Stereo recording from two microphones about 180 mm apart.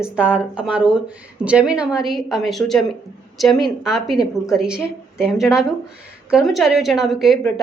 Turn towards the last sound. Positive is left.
turn(degrees=0)  # may be behind; listen again after turning